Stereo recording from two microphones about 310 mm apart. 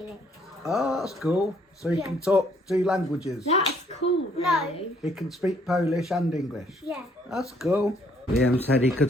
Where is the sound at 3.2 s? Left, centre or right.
Centre.